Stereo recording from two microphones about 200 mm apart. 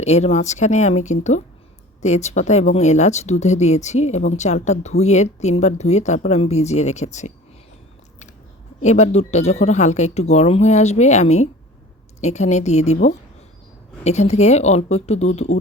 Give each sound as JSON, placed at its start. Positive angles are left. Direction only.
{"t": 0.0, "sound": "speech", "side_deg": 35}
{"t": 8.8, "sound": "speech", "side_deg": 35}